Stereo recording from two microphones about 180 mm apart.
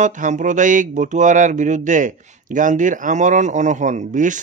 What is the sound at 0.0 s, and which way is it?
Speech, 45° right (ahead or behind).